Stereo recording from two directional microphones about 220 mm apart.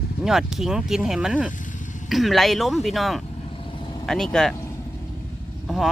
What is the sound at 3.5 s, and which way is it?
Vehicle, 25° left (ahead or behind).